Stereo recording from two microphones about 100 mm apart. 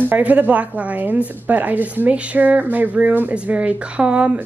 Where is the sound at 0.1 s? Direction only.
15° right (ahead or behind).